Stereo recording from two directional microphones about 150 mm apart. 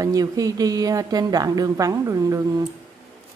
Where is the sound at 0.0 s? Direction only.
25° right (ahead or behind).